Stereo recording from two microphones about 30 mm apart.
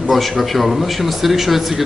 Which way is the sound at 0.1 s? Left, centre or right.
Centre.